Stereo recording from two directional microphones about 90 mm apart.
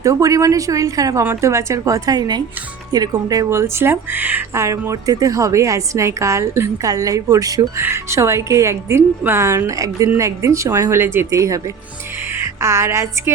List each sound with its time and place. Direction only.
0.0 s a woman's voice: 40° right (ahead or behind)
3.6 s speech: 25° right (ahead or behind)
4.6 s a woman's voice: 35° right (ahead or behind)
7.8 s a woman's voice: 30° right (ahead or behind)
11.3 s a woman's voice: 35° right (ahead or behind)
12.3 s music: 30° right (ahead or behind)